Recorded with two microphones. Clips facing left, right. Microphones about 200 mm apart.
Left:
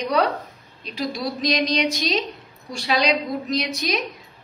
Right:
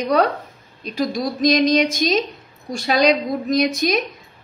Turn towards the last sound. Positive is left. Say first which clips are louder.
# right 6 dB
turn(degrees=-50)  # may be behind; listen again after turning